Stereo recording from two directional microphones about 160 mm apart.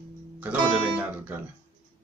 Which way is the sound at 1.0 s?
10° right (ahead or behind).